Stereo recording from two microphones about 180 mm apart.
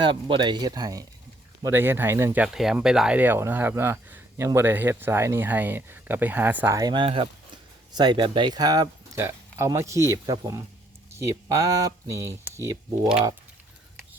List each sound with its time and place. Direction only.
0.0 s speech: 25° right (ahead or behind)